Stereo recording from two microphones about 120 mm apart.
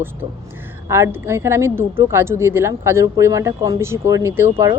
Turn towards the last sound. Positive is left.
turn(degrees=-25)  # may be behind; listen again after turning